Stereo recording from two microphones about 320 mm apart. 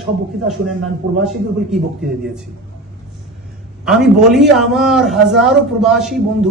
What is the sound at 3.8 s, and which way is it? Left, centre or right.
A man's voice, centre.